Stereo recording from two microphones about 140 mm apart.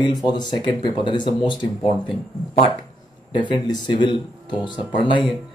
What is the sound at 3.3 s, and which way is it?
Speech, 35° left (ahead or behind).